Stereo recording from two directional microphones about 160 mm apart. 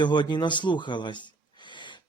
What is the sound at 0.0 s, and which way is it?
A man's voice, 30° left (ahead or behind).